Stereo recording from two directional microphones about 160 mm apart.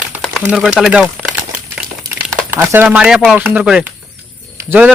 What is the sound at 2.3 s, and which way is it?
Speech, 15° right (ahead or behind).